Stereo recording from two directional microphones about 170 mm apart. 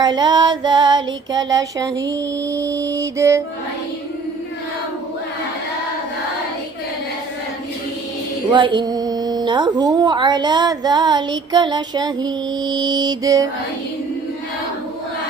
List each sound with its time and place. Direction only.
0.0 s a woman's voice: 25° right (ahead or behind)
8.5 s a woman's voice: 30° right (ahead or behind)